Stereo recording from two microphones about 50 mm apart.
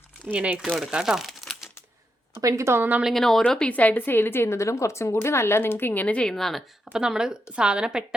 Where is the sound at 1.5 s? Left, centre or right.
Centre.